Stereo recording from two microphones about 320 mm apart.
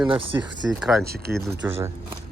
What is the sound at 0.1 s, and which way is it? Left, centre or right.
Speech, centre.